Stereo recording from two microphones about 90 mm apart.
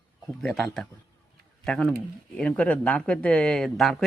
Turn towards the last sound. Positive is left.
turn(degrees=0)  # may be behind; listen again after turning